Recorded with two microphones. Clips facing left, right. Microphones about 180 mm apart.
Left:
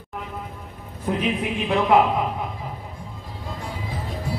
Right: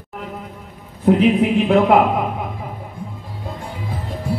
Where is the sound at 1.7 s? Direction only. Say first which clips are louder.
Right 2 dB; 55° right (ahead or behind).